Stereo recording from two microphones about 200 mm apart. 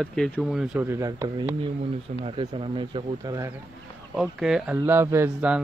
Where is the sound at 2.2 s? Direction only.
25° right (ahead or behind).